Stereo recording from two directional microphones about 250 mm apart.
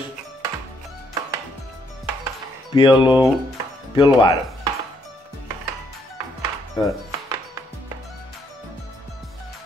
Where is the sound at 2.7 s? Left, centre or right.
Centre.